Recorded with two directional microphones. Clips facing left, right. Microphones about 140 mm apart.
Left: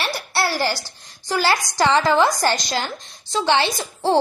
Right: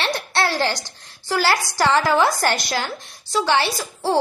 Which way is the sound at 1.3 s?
15° left (ahead or behind).